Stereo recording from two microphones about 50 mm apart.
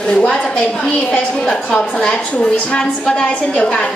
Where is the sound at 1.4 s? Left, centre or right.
Centre.